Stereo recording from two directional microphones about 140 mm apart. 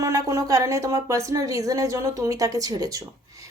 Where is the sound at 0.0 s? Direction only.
25° right (ahead or behind).